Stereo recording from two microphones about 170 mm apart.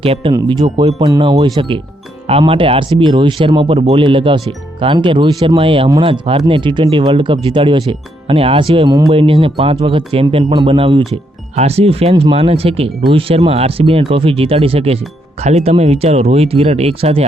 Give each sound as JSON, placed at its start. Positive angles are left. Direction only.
{"t": 0.0, "sound": "speech", "side_deg": -35}
{"t": 8.9, "sound": "speech", "side_deg": -20}
{"t": 9.1, "sound": "speech", "side_deg": -30}